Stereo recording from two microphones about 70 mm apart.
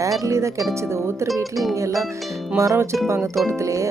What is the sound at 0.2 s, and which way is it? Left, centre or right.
Speech, right.